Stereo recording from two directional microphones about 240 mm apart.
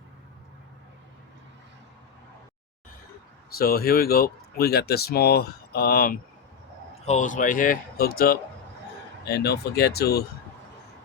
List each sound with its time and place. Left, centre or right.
3.5 s speech: left